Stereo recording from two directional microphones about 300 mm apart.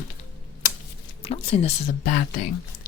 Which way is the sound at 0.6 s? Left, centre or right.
Left.